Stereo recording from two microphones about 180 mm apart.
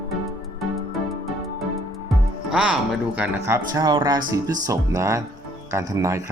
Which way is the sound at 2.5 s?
5° right (ahead or behind).